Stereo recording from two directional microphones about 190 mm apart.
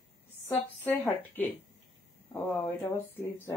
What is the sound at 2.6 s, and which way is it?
Speech, 15° left (ahead or behind).